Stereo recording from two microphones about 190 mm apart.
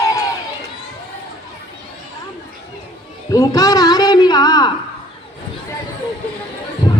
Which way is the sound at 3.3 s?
20° left (ahead or behind).